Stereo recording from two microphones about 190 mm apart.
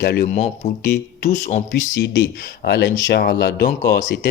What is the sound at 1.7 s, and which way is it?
Speech, 65° left (ahead or behind).